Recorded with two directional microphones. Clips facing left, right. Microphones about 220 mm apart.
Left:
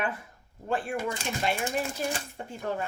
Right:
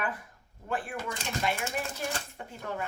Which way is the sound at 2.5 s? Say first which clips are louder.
Left 6 dB; 30° left (ahead or behind).